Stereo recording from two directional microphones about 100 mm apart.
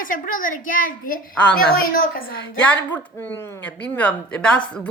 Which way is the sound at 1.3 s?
10° left (ahead or behind).